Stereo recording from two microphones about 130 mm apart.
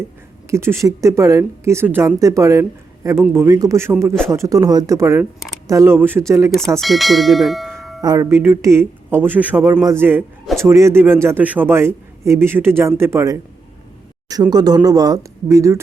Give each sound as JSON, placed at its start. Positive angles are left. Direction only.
{"t": 0.5, "sound": "a woman's voice", "side_deg": -20}
{"t": 6.7, "sound": "speech", "side_deg": 0}
{"t": 8.0, "sound": "a woman's voice", "side_deg": -30}
{"t": 14.5, "sound": "a woman's voice", "side_deg": -30}